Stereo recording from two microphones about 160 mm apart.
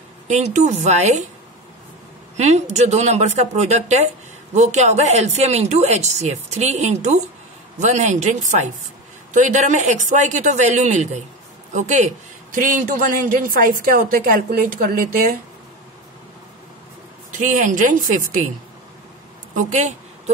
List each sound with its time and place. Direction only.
0.3 s speech: 45° right (ahead or behind)
2.3 s a man's voice: 45° right (ahead or behind); by 15.3 s 65° right (ahead or behind)
17.3 s a man's voice: 50° right (ahead or behind)
19.5 s a sound: 45° right (ahead or behind)